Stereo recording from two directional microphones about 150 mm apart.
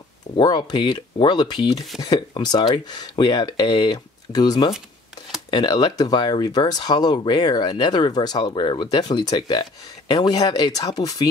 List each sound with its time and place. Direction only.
0.4 s speech: 30° left (ahead or behind)